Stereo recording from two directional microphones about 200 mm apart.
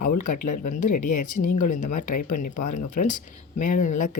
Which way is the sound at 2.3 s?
40° left (ahead or behind).